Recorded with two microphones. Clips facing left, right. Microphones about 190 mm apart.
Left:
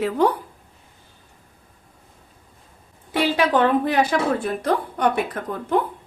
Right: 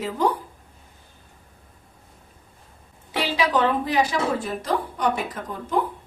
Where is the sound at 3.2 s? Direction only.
55° left (ahead or behind).